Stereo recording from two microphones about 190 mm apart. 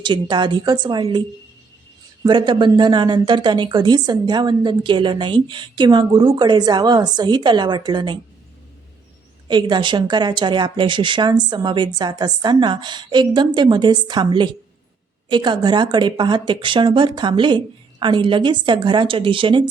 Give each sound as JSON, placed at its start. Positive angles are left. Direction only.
{"t": 0.0, "sound": "speech", "side_deg": -25}
{"t": 2.2, "sound": "speech", "side_deg": -25}
{"t": 9.5, "sound": "speech", "side_deg": -25}